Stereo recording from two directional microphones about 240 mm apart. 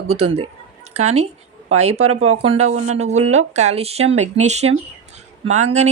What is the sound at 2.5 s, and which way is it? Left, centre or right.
A woman's voice, right.